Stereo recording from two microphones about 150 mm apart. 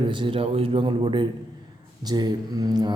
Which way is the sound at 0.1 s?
35° right (ahead or behind).